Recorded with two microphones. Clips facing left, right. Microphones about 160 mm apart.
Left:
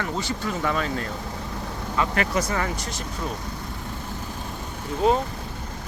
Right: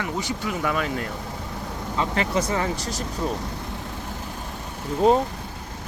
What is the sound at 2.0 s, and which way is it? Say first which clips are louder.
Speech: even; 25° right (ahead or behind).